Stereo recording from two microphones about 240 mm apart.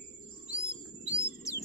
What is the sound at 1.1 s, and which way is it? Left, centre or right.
Bird, centre.